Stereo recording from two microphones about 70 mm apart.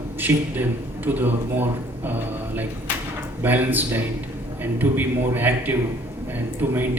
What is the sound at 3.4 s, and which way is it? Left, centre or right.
Speech, right.